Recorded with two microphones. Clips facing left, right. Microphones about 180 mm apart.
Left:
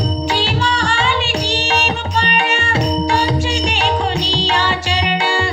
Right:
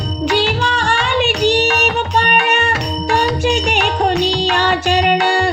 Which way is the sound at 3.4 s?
55° right (ahead or behind).